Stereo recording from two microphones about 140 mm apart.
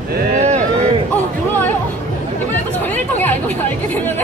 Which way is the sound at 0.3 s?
55° right (ahead or behind).